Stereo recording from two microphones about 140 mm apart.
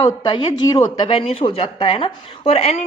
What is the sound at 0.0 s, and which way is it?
A woman's voice, 30° left (ahead or behind).